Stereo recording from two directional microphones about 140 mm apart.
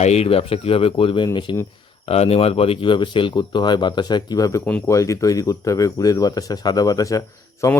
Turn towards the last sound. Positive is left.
turn(degrees=25)  # may be behind; listen again after turning